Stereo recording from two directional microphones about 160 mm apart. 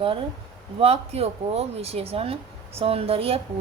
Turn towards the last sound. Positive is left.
turn(degrees=-35)  # may be behind; listen again after turning